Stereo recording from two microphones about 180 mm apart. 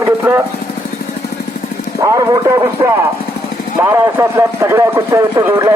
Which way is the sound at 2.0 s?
20° right (ahead or behind).